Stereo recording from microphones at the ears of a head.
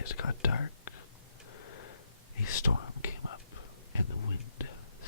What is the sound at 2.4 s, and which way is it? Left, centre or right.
Whispering, left.